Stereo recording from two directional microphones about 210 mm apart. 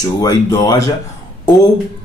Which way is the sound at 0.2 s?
15° left (ahead or behind).